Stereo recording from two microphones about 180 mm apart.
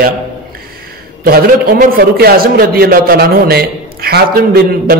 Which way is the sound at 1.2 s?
55° right (ahead or behind).